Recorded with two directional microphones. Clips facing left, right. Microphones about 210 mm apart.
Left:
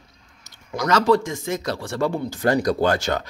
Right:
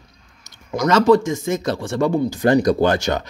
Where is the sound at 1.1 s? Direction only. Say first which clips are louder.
Right 4 dB; 20° right (ahead or behind).